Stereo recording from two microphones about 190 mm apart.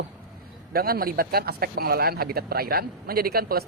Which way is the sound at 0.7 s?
50° right (ahead or behind).